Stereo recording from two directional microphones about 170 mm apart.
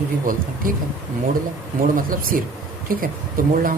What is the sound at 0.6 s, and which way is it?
Speech, 55° right (ahead or behind).